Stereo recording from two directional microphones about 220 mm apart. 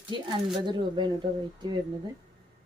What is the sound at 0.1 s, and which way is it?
Speech, 20° right (ahead or behind).